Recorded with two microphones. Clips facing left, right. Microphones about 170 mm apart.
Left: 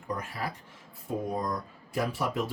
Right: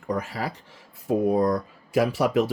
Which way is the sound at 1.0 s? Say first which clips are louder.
Right 10 dB; 75° right (ahead or behind).